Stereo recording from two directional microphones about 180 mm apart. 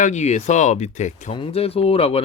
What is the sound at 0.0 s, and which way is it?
Speech, 40° left (ahead or behind).